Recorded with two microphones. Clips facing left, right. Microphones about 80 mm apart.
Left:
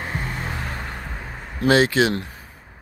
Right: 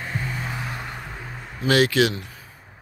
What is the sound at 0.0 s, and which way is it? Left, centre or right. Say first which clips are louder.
Vehicle: left 1 dB; left.